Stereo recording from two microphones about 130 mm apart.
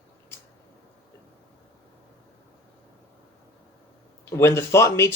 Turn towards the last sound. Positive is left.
turn(degrees=20)  # may be behind; listen again after turning